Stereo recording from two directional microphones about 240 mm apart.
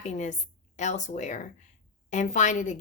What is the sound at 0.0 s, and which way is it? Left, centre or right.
A woman's voice, left.